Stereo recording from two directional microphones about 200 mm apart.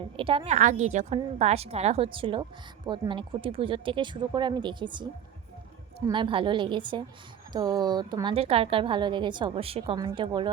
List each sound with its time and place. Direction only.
0.2 s a woman's voice: 25° right (ahead or behind)
6.1 s a woman's voice: 25° right (ahead or behind)